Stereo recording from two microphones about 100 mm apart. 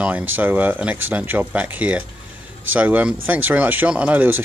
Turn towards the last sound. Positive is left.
turn(degrees=-15)  # may be behind; listen again after turning